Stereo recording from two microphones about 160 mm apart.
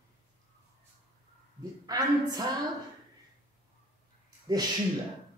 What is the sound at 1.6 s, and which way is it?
Speech, 25° right (ahead or behind).